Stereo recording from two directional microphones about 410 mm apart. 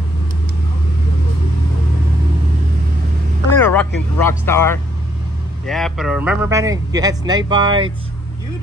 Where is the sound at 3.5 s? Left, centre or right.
Centre.